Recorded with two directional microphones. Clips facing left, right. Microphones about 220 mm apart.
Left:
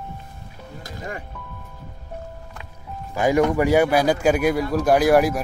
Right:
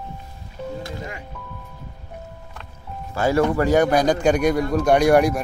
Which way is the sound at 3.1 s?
15° left (ahead or behind).